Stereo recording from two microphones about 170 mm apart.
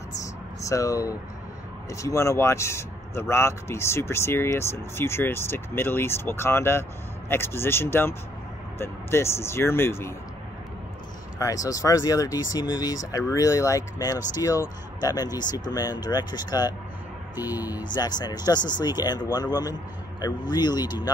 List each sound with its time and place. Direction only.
0.7 s speech: 20° left (ahead or behind)
11.3 s speech: 20° left (ahead or behind)